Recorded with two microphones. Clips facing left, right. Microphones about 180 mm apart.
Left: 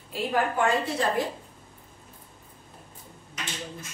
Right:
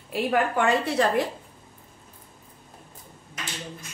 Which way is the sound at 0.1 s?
70° right (ahead or behind).